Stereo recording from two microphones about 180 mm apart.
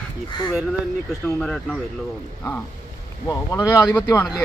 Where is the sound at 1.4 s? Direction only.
5° left (ahead or behind).